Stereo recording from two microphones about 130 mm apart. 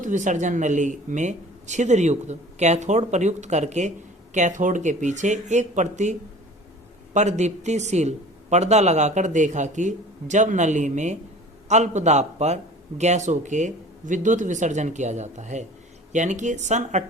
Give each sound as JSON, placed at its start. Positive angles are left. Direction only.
{"t": 0.0, "sound": "speech", "side_deg": -75}
{"t": 4.4, "sound": "speech", "side_deg": -75}